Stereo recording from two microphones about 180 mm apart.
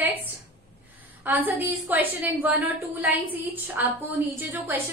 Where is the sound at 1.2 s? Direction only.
10° right (ahead or behind).